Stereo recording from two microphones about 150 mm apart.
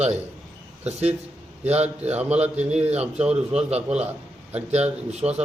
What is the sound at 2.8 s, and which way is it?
Speech, 45° right (ahead or behind).